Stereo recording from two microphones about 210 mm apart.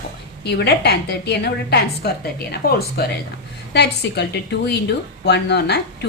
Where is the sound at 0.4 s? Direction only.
50° left (ahead or behind).